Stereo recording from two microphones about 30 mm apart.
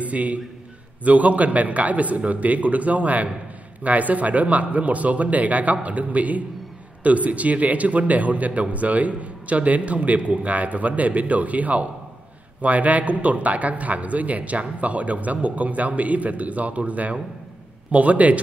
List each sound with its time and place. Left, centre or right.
0.0 s a man's voice: right